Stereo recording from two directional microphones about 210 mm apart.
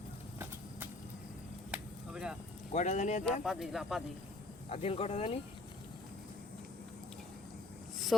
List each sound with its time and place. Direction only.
1.7 s chop: 5° right (ahead or behind)
2.7 s speech: 35° left (ahead or behind)
3.2 s speech: centre (ahead or behind)
4.7 s speech: 30° left (ahead or behind)